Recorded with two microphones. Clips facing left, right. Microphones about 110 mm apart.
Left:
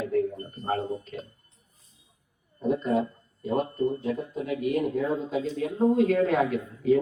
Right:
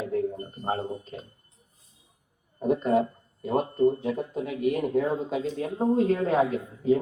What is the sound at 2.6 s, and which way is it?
Speech, 55° right (ahead or behind).